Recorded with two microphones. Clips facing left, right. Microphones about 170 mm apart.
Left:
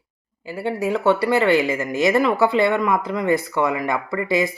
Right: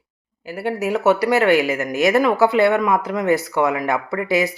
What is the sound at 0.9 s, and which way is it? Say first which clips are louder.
A woman's voice: right 2 dB; 5° right (ahead or behind).